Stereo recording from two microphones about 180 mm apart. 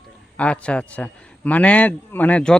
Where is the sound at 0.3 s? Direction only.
5° left (ahead or behind).